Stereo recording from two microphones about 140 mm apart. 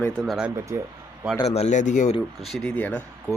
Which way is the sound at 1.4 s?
50° left (ahead or behind).